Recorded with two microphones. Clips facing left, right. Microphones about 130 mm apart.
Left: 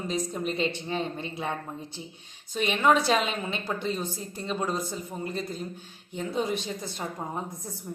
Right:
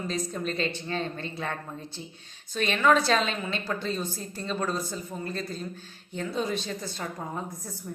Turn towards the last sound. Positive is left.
turn(degrees=15)  # may be behind; listen again after turning